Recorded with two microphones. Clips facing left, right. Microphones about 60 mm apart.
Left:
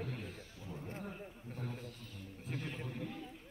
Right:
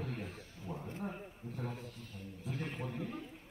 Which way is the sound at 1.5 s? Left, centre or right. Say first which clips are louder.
Right 2 dB; right.